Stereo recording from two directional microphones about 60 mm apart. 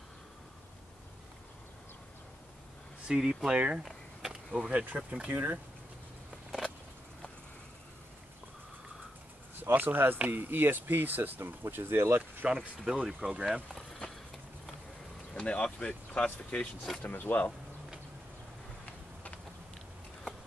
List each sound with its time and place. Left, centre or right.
3.1 s speech: centre; by 5.6 s right
9.6 s speech: right
12.4 s speech: centre
13.7 s a sound: centre
15.3 s speech: centre